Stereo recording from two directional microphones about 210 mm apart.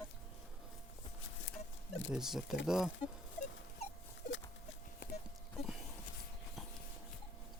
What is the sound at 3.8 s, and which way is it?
Rodents, 30° left (ahead or behind).